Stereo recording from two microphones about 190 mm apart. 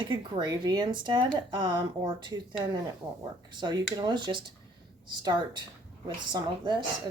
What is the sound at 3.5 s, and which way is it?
Speech, 20° right (ahead or behind).